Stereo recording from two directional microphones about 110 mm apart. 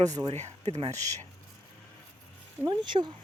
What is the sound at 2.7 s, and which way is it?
Speech, 45° right (ahead or behind).